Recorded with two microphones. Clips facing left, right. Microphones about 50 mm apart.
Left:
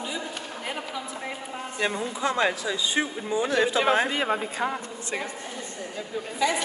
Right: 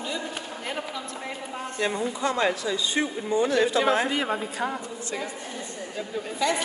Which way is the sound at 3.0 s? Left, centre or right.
Left.